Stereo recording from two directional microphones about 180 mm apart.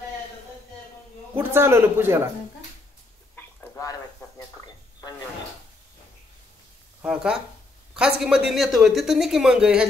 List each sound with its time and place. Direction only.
1.3 s speech: 15° right (ahead or behind)
3.3 s a sound: 10° left (ahead or behind)
7.0 s speech: 5° right (ahead or behind)